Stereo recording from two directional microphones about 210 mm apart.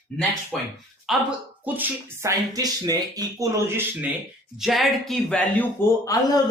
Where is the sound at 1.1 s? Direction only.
5° right (ahead or behind).